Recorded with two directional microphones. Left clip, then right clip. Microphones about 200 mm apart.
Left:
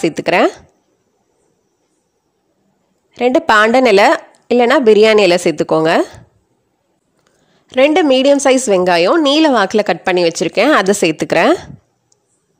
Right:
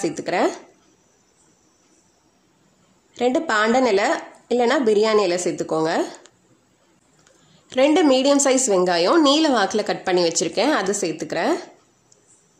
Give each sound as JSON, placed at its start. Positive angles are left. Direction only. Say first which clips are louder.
{"t": 0.0, "sound": "a woman's voice", "louder": "left 9 dB", "side_deg": 40}
{"t": 3.1, "sound": "a woman's voice", "louder": "left 9 dB", "side_deg": 40}
{"t": 7.2, "sound": "a woman's voice", "louder": "left 2 dB", "side_deg": 35}